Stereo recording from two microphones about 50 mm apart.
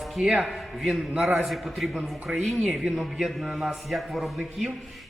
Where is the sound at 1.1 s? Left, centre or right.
Centre.